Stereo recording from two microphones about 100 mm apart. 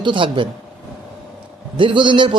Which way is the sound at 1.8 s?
55° right (ahead or behind).